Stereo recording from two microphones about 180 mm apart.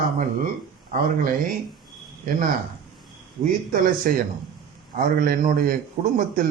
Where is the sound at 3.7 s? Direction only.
50° right (ahead or behind).